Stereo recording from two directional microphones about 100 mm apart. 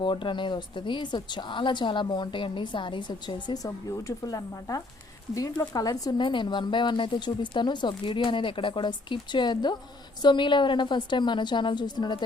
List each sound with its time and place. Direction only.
0.0 s a woman's voice: 55° left (ahead or behind)